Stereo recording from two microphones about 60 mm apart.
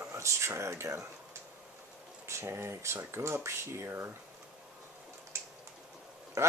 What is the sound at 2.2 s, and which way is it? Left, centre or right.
Speech, right.